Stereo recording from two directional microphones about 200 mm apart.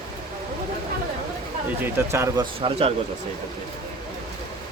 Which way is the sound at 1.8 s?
10° right (ahead or behind).